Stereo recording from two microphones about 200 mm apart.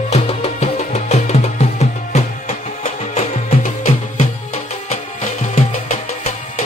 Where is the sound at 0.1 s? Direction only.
30° left (ahead or behind).